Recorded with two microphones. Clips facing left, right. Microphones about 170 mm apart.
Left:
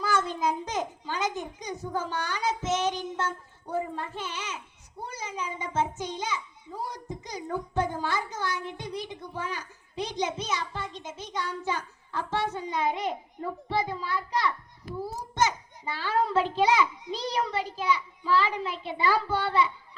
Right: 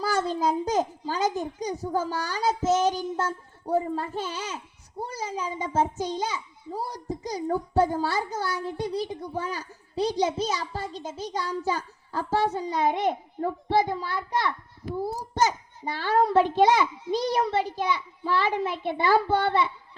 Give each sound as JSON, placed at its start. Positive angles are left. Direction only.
{"t": 0.0, "sound": "a child's voice", "side_deg": -35}
{"t": 13.4, "sound": "a child's voice", "side_deg": -55}
{"t": 15.1, "sound": "a child's voice", "side_deg": -40}